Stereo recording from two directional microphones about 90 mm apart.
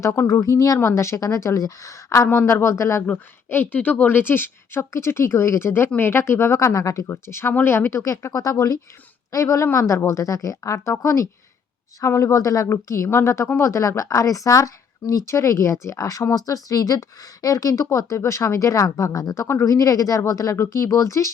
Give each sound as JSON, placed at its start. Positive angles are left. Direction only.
{"t": 0.0, "sound": "speech", "side_deg": 35}
{"t": 3.1, "sound": "speech", "side_deg": 20}